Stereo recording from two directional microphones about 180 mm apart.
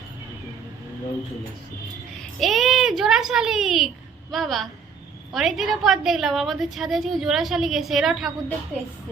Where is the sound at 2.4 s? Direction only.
Centre (ahead or behind).